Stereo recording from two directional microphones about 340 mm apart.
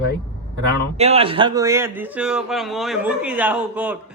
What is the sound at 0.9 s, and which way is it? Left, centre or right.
A man's voice, centre.